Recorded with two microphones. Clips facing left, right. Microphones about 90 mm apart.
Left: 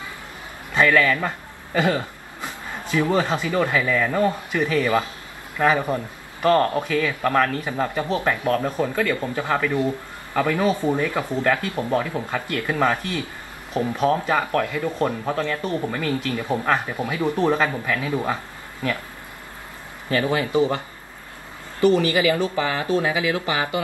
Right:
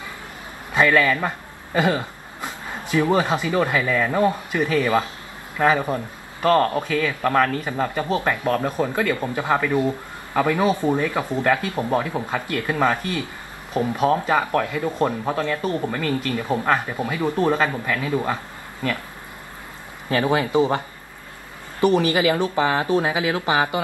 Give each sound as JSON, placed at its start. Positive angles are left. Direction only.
{"t": 0.7, "sound": "speech", "side_deg": -15}
{"t": 8.0, "sound": "speech", "side_deg": -15}
{"t": 13.7, "sound": "speech", "side_deg": -20}
{"t": 16.3, "sound": "speech", "side_deg": -15}
{"t": 17.5, "sound": "speech", "side_deg": 0}
{"t": 20.1, "sound": "speech", "side_deg": -25}